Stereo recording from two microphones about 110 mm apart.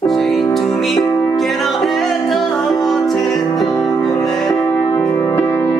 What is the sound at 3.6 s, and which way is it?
Music, 30° left (ahead or behind).